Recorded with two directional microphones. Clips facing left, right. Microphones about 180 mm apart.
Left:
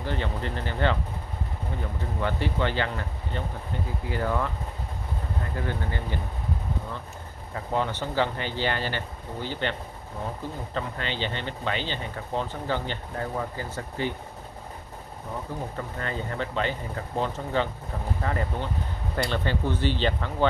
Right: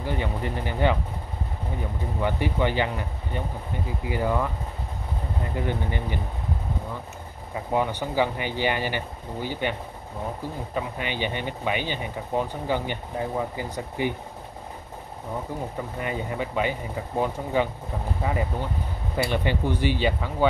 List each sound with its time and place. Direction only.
0.0 s speech: 10° right (ahead or behind)
2.2 s speech: 15° right (ahead or behind)
7.5 s speech: 15° right (ahead or behind)
16.0 s speech: 15° right (ahead or behind)